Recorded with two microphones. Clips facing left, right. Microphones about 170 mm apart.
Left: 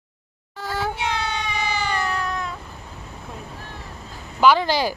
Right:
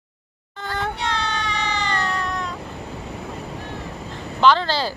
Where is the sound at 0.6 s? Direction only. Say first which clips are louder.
Left 1 dB; 5° left (ahead or behind).